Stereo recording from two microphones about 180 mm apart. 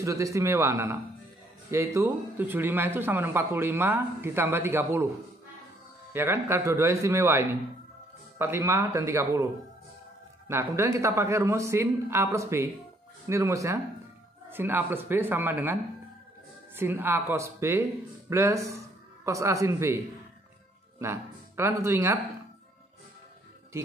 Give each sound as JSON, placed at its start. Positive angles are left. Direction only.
{"t": 0.0, "sound": "speech", "side_deg": -15}
{"t": 6.1, "sound": "speech", "side_deg": -15}
{"t": 10.5, "sound": "a man's voice", "side_deg": -15}
{"t": 21.0, "sound": "speech", "side_deg": -15}